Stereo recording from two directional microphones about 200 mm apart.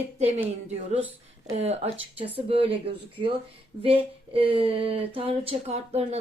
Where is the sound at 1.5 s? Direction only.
30° right (ahead or behind).